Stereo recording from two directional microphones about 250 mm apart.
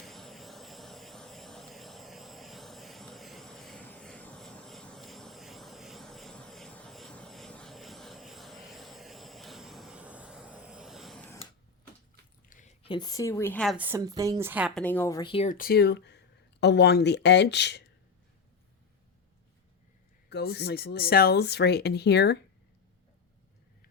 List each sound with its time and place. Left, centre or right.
0.0 s vehicle: centre
12.5 s speech: left
20.3 s speech: left